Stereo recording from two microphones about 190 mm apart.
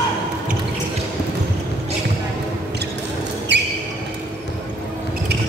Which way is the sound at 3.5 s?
65° right (ahead or behind).